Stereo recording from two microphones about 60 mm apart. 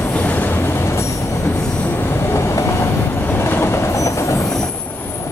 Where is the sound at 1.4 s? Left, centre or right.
Left.